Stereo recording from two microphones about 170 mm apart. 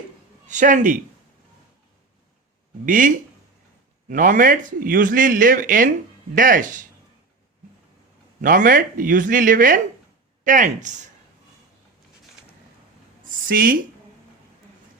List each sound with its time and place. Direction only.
0.4 s a man's voice: 50° right (ahead or behind)
2.8 s a man's voice: 50° right (ahead or behind)
4.1 s a man's voice: 50° right (ahead or behind)
8.4 s a man's voice: 50° right (ahead or behind)
13.2 s a sound: 55° right (ahead or behind)